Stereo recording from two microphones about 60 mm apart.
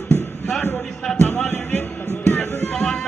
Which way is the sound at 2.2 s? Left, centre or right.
Left.